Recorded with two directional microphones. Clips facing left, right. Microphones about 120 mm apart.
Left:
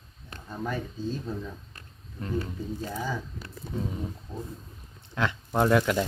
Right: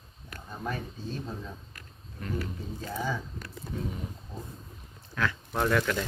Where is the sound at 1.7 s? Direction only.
25° left (ahead or behind).